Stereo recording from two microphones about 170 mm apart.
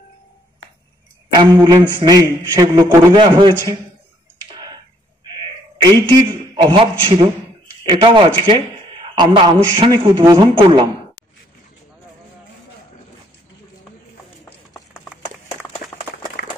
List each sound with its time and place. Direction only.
1.3 s a man's voice: 20° right (ahead or behind)
4.5 s tick-tock: 25° right (ahead or behind)
5.4 s a man's voice: 30° right (ahead or behind)